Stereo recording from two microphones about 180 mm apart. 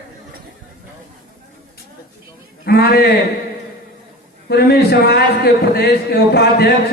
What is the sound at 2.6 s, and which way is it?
Speech, 60° left (ahead or behind).